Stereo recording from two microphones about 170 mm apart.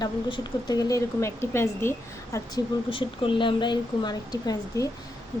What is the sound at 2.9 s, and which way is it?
Speech, 30° left (ahead or behind).